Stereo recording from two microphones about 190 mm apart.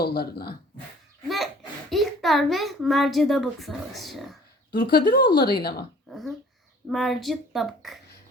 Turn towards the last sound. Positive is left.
turn(degrees=0)  # may be behind; listen again after turning